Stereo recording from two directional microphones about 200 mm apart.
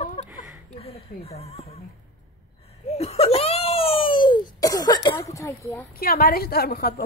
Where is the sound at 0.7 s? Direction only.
30° left (ahead or behind).